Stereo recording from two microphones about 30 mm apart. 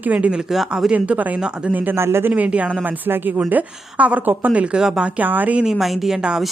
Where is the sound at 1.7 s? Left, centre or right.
Right.